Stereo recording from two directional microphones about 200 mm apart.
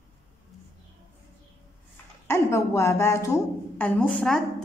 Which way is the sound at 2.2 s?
15° left (ahead or behind).